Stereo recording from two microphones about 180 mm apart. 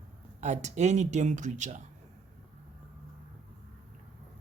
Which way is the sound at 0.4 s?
40° right (ahead or behind).